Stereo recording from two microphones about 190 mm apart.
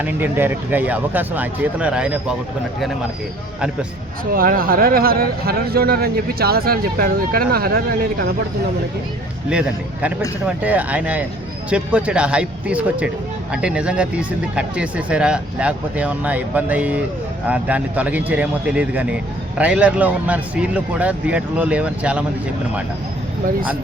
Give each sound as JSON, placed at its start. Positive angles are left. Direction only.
{"t": 0.0, "sound": "speech", "side_deg": -10}
{"t": 4.3, "sound": "speech", "side_deg": -50}
{"t": 9.5, "sound": "speech", "side_deg": -5}